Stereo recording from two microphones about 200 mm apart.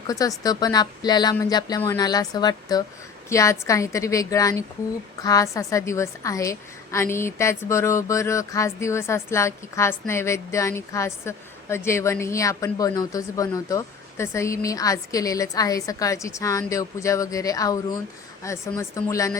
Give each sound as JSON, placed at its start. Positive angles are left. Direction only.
{"t": 0.1, "sound": "a woman's voice", "side_deg": 15}